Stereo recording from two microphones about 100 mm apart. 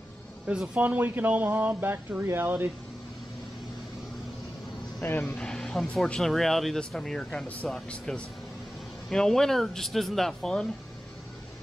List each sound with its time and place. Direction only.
0.5 s speech: 15° right (ahead or behind)
5.2 s speech: 5° left (ahead or behind)